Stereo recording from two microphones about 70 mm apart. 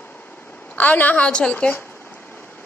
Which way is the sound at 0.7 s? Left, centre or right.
Left.